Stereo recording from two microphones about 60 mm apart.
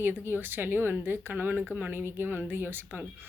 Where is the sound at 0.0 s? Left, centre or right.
Right.